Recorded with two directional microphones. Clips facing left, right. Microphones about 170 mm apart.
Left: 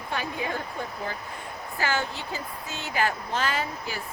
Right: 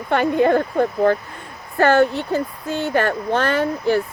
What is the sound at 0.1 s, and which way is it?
Speech, 60° right (ahead or behind).